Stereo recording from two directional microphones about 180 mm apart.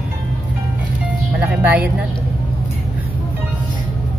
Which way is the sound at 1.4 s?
10° right (ahead or behind).